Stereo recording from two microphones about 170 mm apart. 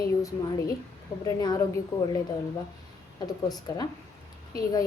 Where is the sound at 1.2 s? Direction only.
20° left (ahead or behind).